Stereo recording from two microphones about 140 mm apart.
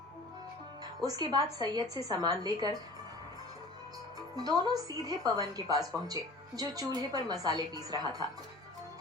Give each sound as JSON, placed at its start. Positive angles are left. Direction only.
{"t": 1.0, "sound": "a woman's voice", "side_deg": -30}
{"t": 4.4, "sound": "a woman's voice", "side_deg": -30}